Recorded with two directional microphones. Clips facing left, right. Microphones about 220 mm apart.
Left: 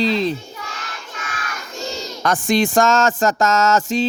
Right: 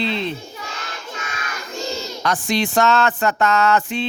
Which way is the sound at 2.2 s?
50° left (ahead or behind).